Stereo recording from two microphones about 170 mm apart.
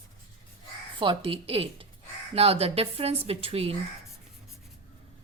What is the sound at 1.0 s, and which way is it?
A woman's voice, 30° right (ahead or behind).